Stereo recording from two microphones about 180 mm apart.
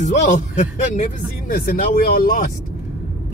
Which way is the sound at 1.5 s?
55° left (ahead or behind).